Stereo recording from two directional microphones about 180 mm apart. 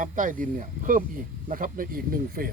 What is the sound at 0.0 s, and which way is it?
Speech, 45° right (ahead or behind).